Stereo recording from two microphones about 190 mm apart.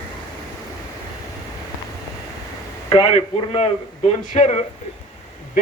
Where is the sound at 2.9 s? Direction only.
30° left (ahead or behind).